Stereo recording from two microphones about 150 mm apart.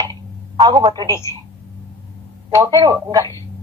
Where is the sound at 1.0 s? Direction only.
20° left (ahead or behind).